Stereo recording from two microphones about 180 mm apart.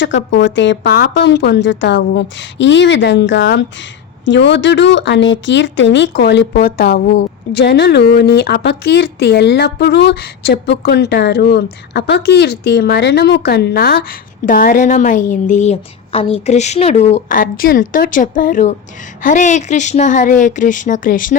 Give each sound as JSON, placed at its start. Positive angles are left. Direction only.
{"t": 0.0, "sound": "a woman's voice", "side_deg": 90}